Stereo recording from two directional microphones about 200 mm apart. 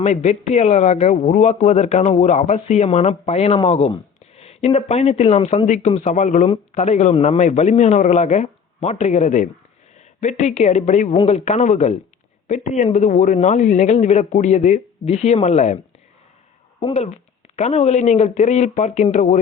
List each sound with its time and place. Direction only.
0.0 s speech: 35° left (ahead or behind)
16.8 s speech: 35° left (ahead or behind)